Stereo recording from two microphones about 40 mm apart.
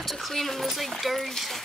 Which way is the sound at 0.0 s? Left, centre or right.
Centre.